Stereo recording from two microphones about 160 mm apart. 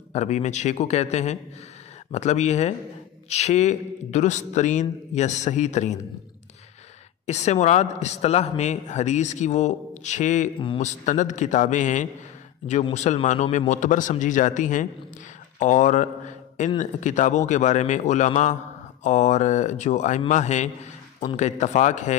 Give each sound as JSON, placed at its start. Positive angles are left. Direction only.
{"t": 0.1, "sound": "a man's voice", "side_deg": 45}
{"t": 7.2, "sound": "a man's voice", "side_deg": 45}